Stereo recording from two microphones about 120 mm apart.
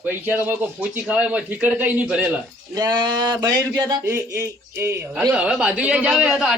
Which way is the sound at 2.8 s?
35° right (ahead or behind).